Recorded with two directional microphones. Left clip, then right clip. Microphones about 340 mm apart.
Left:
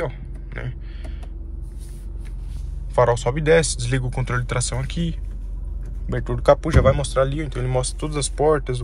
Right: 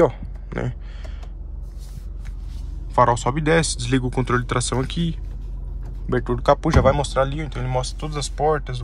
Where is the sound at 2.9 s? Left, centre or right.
Centre.